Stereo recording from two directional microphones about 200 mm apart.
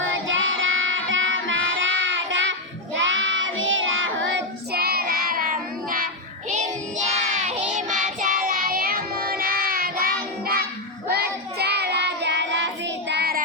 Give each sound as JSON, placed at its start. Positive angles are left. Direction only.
{"t": 0.0, "sound": "music", "side_deg": -75}
{"t": 6.5, "sound": "child singing", "side_deg": -35}